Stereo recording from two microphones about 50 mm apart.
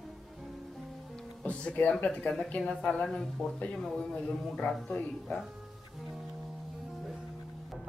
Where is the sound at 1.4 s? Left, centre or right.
Left.